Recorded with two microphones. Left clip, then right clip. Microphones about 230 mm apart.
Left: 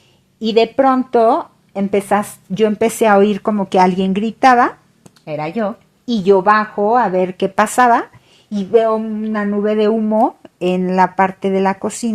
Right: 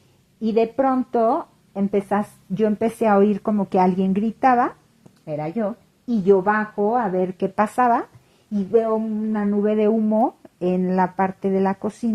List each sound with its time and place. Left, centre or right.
0.4 s speech: left